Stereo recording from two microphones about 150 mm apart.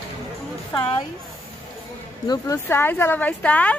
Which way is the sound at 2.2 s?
25° left (ahead or behind).